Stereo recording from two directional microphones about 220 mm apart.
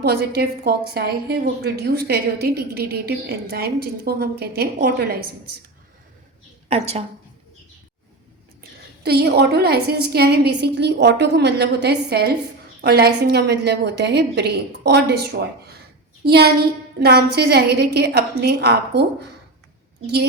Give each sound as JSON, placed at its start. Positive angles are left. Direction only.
{"t": 0.0, "sound": "a woman's voice", "side_deg": -45}
{"t": 6.7, "sound": "a woman's voice", "side_deg": -30}
{"t": 9.0, "sound": "a woman's voice", "side_deg": -45}